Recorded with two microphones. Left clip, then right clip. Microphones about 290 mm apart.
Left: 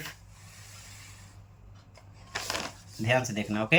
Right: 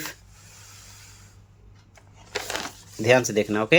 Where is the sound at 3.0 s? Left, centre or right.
Centre.